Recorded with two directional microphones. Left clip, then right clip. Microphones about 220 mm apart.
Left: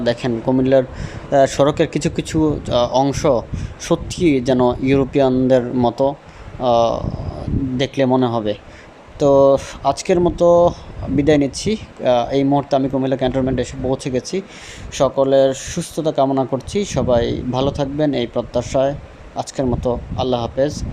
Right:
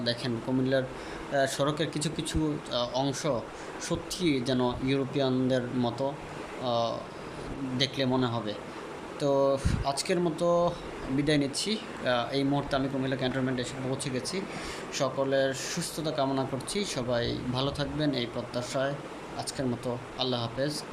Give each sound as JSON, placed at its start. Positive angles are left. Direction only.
{"t": 0.0, "sound": "speech", "side_deg": 30}